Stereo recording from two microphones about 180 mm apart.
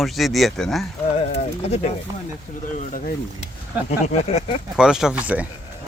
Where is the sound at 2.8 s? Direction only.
45° left (ahead or behind).